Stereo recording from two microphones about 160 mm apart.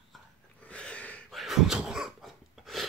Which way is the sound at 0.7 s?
5° left (ahead or behind).